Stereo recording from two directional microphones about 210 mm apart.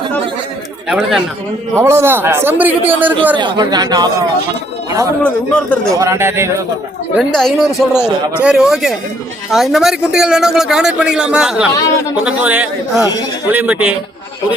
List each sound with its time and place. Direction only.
0.9 s a man's voice: centre (ahead or behind)
3.3 s speech: 20° right (ahead or behind)
5.2 s speech: 5° left (ahead or behind)
5.9 s a man's voice: 15° right (ahead or behind)
7.2 s a man's voice: centre (ahead or behind)